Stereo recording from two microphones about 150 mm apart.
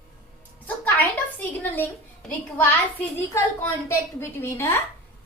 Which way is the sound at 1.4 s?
15° left (ahead or behind).